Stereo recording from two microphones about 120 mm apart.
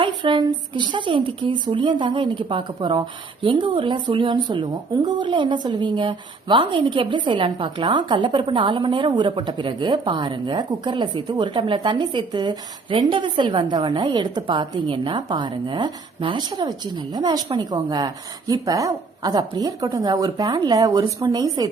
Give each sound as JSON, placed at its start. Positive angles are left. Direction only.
{"t": 0.0, "sound": "a woman's voice", "side_deg": -40}